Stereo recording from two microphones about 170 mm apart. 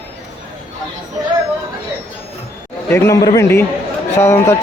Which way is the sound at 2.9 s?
15° left (ahead or behind).